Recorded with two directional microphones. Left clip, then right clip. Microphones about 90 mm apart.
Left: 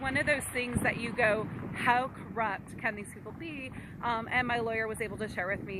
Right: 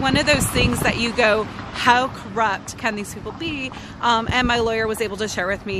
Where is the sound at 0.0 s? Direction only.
50° right (ahead or behind).